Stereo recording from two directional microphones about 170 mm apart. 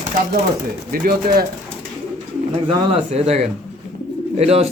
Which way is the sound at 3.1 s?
40° right (ahead or behind).